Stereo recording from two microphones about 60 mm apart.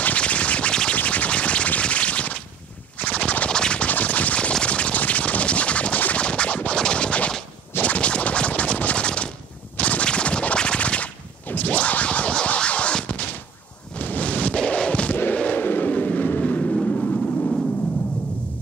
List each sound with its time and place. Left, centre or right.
0.0 s music: left
0.9 s scratch: left
3.0 s scratching: left
9.8 s a sound: left